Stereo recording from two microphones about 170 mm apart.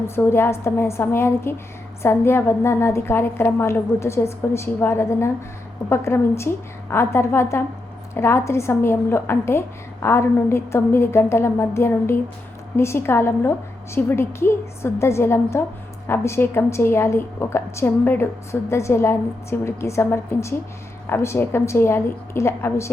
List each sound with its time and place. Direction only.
0.2 s a woman's voice: 15° left (ahead or behind)